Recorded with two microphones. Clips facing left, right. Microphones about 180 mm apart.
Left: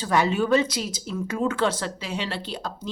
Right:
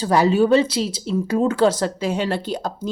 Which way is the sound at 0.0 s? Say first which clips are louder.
Right 6 dB; 35° right (ahead or behind).